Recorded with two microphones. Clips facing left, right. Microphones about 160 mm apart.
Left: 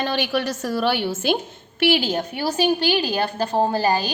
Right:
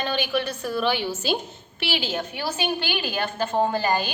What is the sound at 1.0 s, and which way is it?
A woman's voice, 55° left (ahead or behind).